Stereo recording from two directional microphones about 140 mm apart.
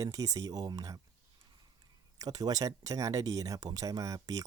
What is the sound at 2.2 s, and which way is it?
Speech, 25° right (ahead or behind).